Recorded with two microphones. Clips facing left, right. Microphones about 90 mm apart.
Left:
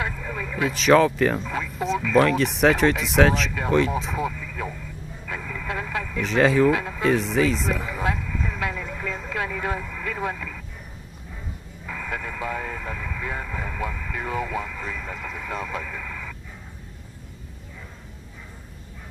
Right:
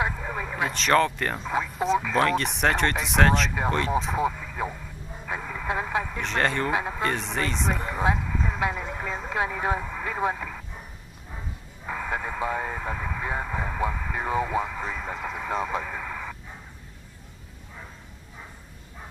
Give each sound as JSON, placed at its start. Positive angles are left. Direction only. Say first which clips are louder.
{"t": 0.0, "sound": "a sound", "louder": "right 1 dB", "side_deg": -25}
{"t": 0.7, "sound": "speech", "louder": "left 5 dB", "side_deg": 0}
{"t": 1.5, "sound": "a sound", "louder": "right 2 dB", "side_deg": -30}
{"t": 2.1, "sound": "speech", "louder": "left 4 dB", "side_deg": 0}
{"t": 4.2, "sound": "speech", "louder": "right 2 dB", "side_deg": -25}
{"t": 5.2, "sound": "vehicle", "louder": "right 1 dB", "side_deg": -25}
{"t": 6.2, "sound": "speech", "louder": "left 10 dB", "side_deg": 0}
{"t": 6.7, "sound": "speech", "louder": "left 3 dB", "side_deg": -25}
{"t": 7.0, "sound": "speech", "louder": "left 6 dB", "side_deg": 0}
{"t": 8.0, "sound": "speech", "louder": "right 1 dB", "side_deg": -25}
{"t": 11.8, "sound": "speech", "louder": "right 2 dB", "side_deg": -30}